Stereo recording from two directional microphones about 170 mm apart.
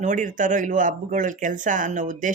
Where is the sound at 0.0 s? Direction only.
45° right (ahead or behind).